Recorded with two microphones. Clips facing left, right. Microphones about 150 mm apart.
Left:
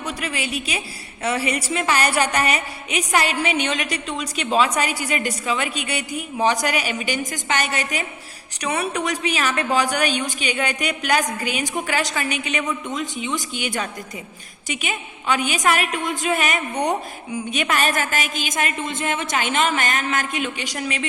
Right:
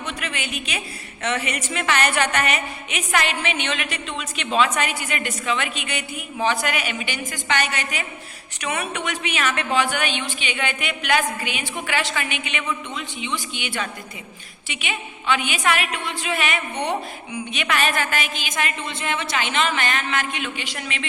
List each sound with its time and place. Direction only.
0.0 s a woman's voice: 35° left (ahead or behind)